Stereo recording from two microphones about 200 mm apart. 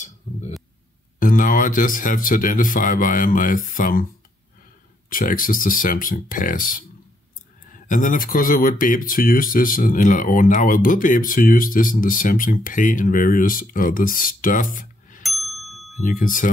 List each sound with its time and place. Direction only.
0.3 s a sound: 40° left (ahead or behind)
1.2 s speech: 45° left (ahead or behind)
5.1 s speech: 45° left (ahead or behind)
15.2 s ding: centre (ahead or behind)
16.0 s speech: 40° left (ahead or behind)